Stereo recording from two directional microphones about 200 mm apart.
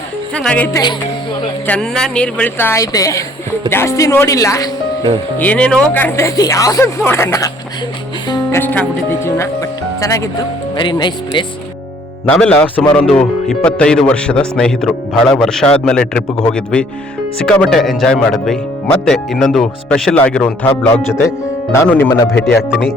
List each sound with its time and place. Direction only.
0.3 s speech: 5° left (ahead or behind)
5.4 s speech: 5° left (ahead or behind); by 11.4 s 25° left (ahead or behind)
12.3 s speech: 5° left (ahead or behind)